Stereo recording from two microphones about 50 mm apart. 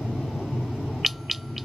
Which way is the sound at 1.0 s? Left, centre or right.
Centre.